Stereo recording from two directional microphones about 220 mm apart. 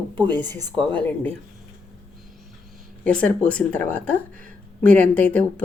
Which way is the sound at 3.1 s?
5° left (ahead or behind).